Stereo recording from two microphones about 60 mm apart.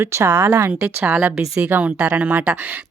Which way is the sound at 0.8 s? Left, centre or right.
Right.